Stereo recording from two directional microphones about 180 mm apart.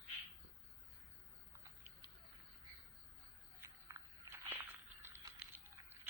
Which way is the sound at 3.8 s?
15° right (ahead or behind).